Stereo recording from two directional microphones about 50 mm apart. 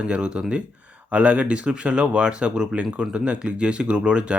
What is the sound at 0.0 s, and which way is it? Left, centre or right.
Speech, right.